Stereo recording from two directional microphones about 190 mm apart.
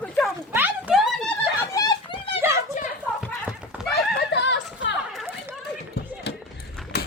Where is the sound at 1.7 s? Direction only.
20° left (ahead or behind).